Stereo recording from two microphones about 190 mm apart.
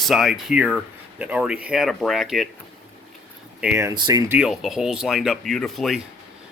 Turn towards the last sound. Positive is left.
turn(degrees=0)  # may be behind; listen again after turning